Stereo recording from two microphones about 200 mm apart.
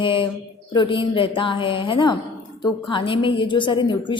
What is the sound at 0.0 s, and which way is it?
A woman's voice, 25° left (ahead or behind).